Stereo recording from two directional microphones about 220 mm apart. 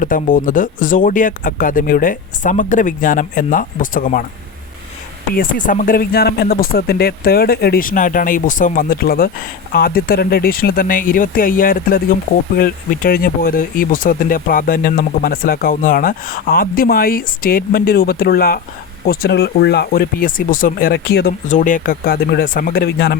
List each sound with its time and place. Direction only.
0.0 s speech: 40° left (ahead or behind)
5.3 s speech: 40° left (ahead or behind)
21.4 s speech: 35° left (ahead or behind)